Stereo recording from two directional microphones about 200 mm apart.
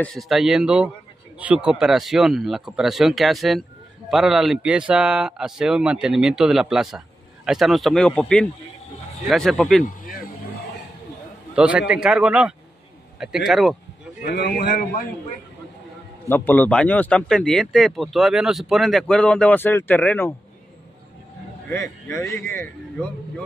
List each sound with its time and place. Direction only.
0.0 s speech: centre (ahead or behind)
9.8 s speech: 45° left (ahead or behind)
11.5 s a man's voice: 5° right (ahead or behind)
14.2 s a man's voice: 55° left (ahead or behind)
16.3 s speech: 10° left (ahead or behind)
21.6 s speech: 15° left (ahead or behind)